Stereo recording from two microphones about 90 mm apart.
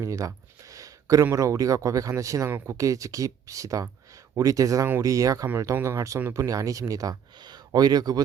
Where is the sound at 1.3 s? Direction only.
35° right (ahead or behind).